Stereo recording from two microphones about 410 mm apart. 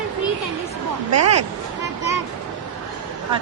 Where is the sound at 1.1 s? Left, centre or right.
Right.